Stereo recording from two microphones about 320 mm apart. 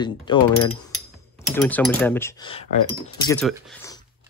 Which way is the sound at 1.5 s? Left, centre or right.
Centre.